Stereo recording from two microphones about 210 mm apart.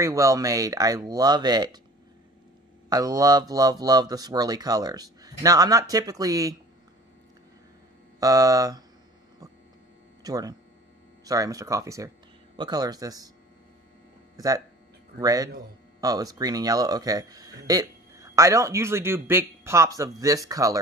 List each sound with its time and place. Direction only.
0.0 s speech: 15° right (ahead or behind)
2.9 s speech: 15° right (ahead or behind)
8.2 s speech: 15° right (ahead or behind)
10.2 s speech: 20° right (ahead or behind)
14.3 s a sound: 15° right (ahead or behind)
15.1 s speech: 15° right (ahead or behind)